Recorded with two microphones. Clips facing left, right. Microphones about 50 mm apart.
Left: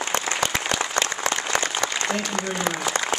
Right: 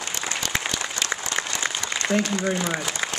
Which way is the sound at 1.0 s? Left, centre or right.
Left.